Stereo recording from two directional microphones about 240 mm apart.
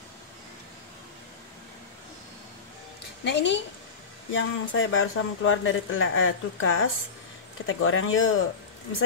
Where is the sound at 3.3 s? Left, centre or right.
Left.